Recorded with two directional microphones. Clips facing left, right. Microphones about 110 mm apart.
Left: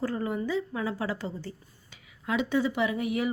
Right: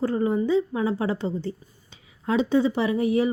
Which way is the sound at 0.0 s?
25° right (ahead or behind).